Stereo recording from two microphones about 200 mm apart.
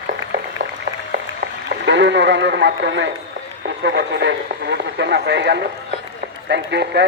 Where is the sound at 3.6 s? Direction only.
60° right (ahead or behind).